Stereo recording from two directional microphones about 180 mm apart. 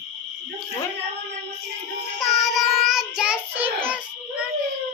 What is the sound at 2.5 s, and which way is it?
Child singing, centre (ahead or behind).